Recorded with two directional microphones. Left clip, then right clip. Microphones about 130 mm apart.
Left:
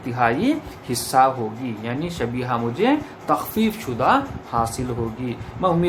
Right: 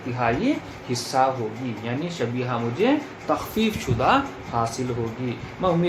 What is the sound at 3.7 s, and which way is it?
Speech, 40° left (ahead or behind).